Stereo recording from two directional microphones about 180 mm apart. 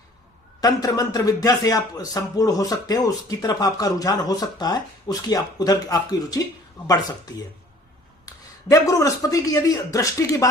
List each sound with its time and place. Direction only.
0.6 s speech: 20° left (ahead or behind)
8.7 s speech: 20° left (ahead or behind)